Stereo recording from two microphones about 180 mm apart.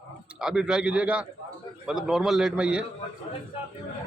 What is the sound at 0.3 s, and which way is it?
A man's voice, 5° right (ahead or behind).